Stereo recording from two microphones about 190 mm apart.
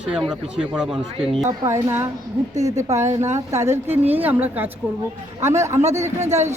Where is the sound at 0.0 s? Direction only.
5° right (ahead or behind).